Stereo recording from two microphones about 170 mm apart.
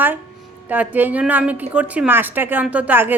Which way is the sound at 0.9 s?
10° right (ahead or behind).